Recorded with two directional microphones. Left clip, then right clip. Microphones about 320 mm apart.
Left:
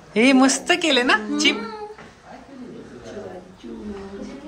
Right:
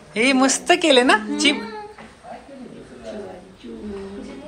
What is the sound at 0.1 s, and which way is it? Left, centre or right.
A woman's voice, centre.